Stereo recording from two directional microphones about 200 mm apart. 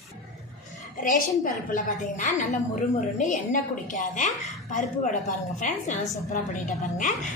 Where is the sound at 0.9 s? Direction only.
45° left (ahead or behind).